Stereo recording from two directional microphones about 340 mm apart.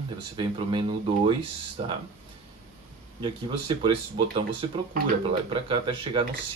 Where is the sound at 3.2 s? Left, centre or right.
Centre.